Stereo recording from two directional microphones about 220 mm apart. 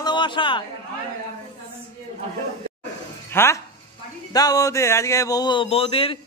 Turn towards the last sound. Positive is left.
turn(degrees=25)  # may be behind; listen again after turning